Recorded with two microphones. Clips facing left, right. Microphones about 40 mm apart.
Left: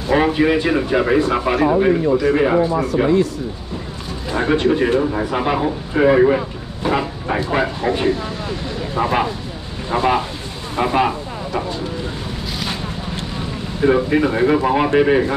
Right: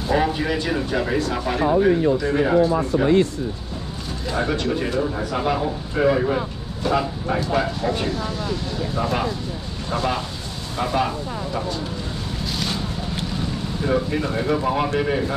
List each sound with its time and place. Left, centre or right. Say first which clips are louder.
0.1 s speech: left 6 dB; left
4.4 s speech: left 7 dB; left
13.7 s speech: left 8 dB; left